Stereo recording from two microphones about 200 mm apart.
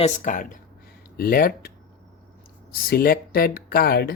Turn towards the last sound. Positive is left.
turn(degrees=50)  # may be behind; listen again after turning